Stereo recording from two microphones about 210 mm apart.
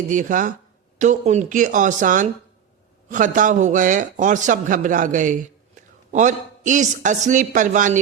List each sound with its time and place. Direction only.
0.1 s a man's voice: 40° right (ahead or behind)